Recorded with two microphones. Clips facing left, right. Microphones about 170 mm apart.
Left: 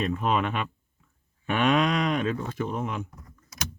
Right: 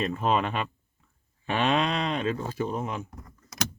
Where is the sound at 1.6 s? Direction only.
30° right (ahead or behind).